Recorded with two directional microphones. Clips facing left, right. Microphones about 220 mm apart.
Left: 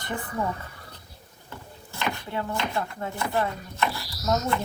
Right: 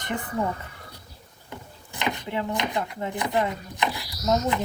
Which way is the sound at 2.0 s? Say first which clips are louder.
Right 2 dB; 20° right (ahead or behind).